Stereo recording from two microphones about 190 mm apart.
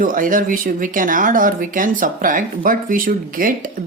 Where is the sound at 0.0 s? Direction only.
45° right (ahead or behind).